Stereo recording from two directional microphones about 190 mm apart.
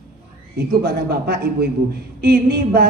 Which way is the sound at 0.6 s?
55° right (ahead or behind).